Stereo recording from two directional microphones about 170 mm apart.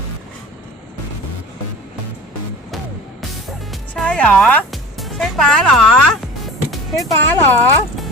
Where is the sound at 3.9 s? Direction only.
5° left (ahead or behind).